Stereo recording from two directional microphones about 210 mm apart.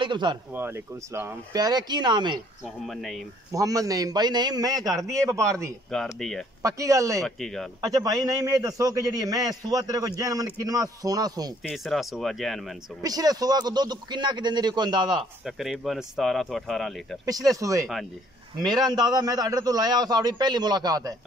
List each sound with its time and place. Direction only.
0.0 s a man's voice: 20° right (ahead or behind)
0.6 s a man's voice: 10° right (ahead or behind)
2.9 s speech: centre (ahead or behind)
3.5 s a man's voice: 15° right (ahead or behind)
6.1 s speech: centre (ahead or behind)
6.6 s a man's voice: 15° right (ahead or behind)
7.2 s speech: centre (ahead or behind)
7.8 s a man's voice: 15° right (ahead or behind)
11.6 s speech: centre (ahead or behind)
13.0 s a man's voice: 20° right (ahead or behind)
15.4 s speech: centre (ahead or behind)
17.6 s a man's voice: 15° right (ahead or behind)